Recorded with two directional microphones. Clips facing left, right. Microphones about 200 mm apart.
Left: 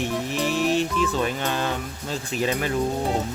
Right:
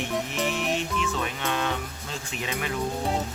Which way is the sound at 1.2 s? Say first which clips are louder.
Left 4 dB; 35° left (ahead or behind).